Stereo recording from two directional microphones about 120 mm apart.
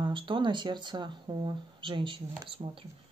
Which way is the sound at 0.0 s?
45° right (ahead or behind).